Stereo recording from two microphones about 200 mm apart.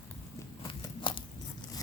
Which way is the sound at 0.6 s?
25° left (ahead or behind).